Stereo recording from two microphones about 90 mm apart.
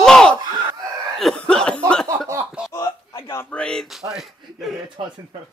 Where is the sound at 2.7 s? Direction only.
30° left (ahead or behind).